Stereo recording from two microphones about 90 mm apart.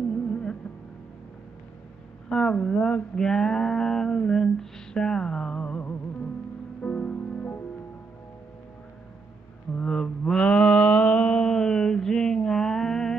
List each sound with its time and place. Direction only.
0.1 s music: 10° left (ahead or behind)
2.2 s speech: 10° left (ahead or behind)
3.2 s a sound: 5° left (ahead or behind)
6.8 s music: 15° left (ahead or behind)
9.8 s mantra: 10° left (ahead or behind)